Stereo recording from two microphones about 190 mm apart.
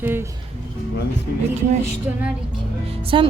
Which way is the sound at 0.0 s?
10° right (ahead or behind).